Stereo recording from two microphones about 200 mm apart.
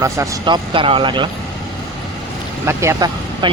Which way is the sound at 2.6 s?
15° right (ahead or behind).